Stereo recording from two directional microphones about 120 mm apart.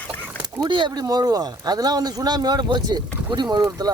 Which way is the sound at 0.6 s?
40° right (ahead or behind).